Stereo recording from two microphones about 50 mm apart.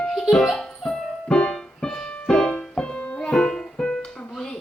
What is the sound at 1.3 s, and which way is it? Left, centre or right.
Music, left.